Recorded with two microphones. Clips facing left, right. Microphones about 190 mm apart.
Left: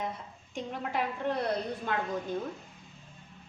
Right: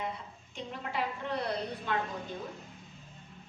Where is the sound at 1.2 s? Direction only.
55° left (ahead or behind).